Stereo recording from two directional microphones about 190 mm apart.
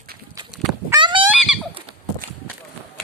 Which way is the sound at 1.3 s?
5° right (ahead or behind).